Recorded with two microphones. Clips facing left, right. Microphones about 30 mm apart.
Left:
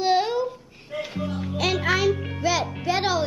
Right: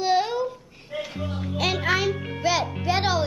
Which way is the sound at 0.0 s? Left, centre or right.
Centre.